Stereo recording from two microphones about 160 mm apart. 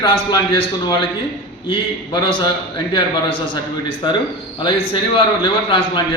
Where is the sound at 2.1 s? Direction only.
30° left (ahead or behind).